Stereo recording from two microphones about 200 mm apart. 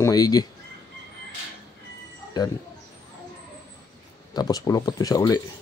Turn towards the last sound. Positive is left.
turn(degrees=20)  # may be behind; listen again after turning